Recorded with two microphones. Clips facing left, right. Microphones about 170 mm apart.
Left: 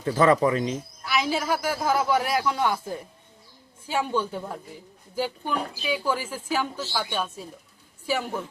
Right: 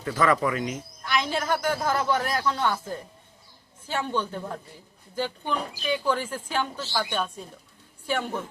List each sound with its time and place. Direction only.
0.0 s speech: 30° left (ahead or behind)
1.0 s a man's voice: 5° left (ahead or behind)